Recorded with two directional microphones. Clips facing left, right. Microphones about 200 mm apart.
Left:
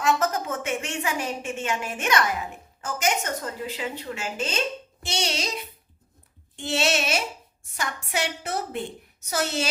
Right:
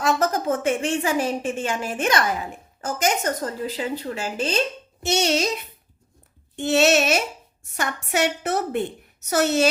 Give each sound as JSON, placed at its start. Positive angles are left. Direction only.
{"t": 0.0, "sound": "a woman's voice", "side_deg": -35}
{"t": 5.0, "sound": "a child's voice", "side_deg": -50}
{"t": 6.6, "sound": "a child's voice", "side_deg": -50}